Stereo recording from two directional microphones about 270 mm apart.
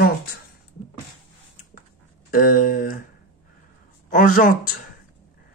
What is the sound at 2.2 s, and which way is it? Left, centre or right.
Speech, left.